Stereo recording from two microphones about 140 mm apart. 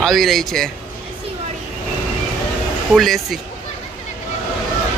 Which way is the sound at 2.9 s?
Centre (ahead or behind).